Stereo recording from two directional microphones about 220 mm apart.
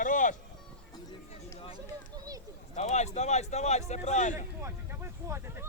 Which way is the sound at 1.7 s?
15° right (ahead or behind).